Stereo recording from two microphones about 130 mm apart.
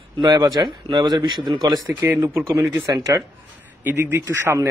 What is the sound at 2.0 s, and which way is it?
Speech, 20° right (ahead or behind).